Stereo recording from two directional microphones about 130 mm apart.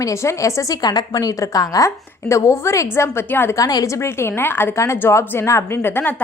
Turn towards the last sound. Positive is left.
turn(degrees=15)  # may be behind; listen again after turning